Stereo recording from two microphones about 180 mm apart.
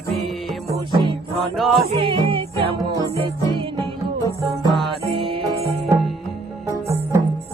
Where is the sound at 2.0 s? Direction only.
30° right (ahead or behind).